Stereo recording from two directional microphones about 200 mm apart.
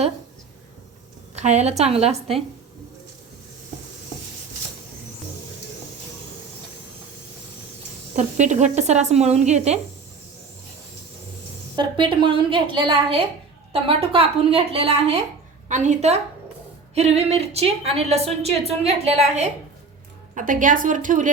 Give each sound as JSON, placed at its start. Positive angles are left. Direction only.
{"t": 1.4, "sound": "a woman's voice", "side_deg": -35}
{"t": 8.1, "sound": "a woman's voice", "side_deg": -35}
{"t": 11.8, "sound": "a woman's voice", "side_deg": -25}